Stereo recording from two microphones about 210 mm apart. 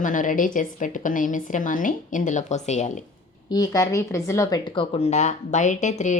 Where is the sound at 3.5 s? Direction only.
15° left (ahead or behind); by 6.1 s 35° left (ahead or behind).